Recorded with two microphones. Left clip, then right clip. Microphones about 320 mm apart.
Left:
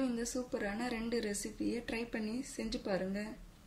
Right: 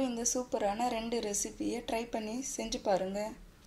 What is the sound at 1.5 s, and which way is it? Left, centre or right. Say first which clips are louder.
Speech: right 3 dB; right.